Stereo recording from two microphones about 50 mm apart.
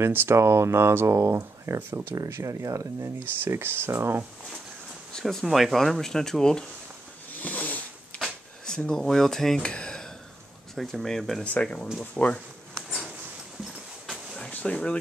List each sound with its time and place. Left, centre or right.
0.0 s speech: right
0.4 s speech: right
1.8 s speech: right
2.2 s speech: right
5.4 s speech: centre
7.3 s a sound: left
8.6 s speech: centre
9.6 s a sound: centre
10.7 s speech: centre
11.6 s speech: left
12.7 s a sound: centre
14.5 s speech: left